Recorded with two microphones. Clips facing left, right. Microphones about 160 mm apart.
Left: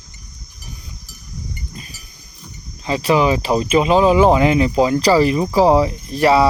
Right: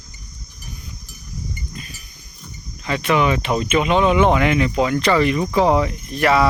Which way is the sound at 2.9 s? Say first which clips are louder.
Left 3 dB; 30° left (ahead or behind).